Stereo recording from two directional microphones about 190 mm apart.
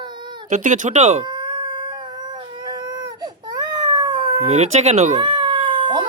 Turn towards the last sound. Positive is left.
turn(degrees=-25)  # may be behind; listen again after turning